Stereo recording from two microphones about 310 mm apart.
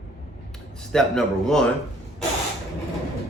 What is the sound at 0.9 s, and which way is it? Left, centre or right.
Speech, centre.